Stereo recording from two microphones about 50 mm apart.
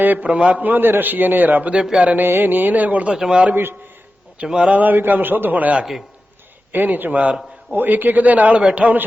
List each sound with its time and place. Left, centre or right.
0.0 s a man's voice: right
0.3 s a man's voice: right
0.6 s a man's voice: right
1.7 s speech: centre
2.0 s a man's voice: right
3.2 s speech: centre
3.5 s a man's voice: right
4.4 s speech: centre
4.8 s a man's voice: right
6.7 s a man's voice: right